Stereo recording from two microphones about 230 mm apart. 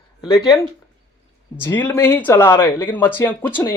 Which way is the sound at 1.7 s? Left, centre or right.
Centre.